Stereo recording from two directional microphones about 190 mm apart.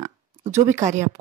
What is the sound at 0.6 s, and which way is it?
Speech, 40° right (ahead or behind).